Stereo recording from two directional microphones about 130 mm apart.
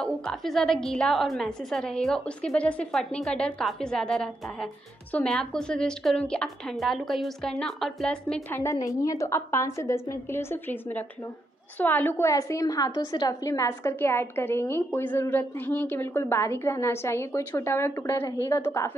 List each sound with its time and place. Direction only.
0.0 s a woman's voice: 5° left (ahead or behind)
8.7 s a woman's voice: 25° left (ahead or behind)